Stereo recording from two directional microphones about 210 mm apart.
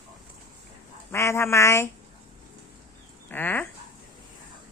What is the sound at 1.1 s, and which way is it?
Speech, 15° left (ahead or behind).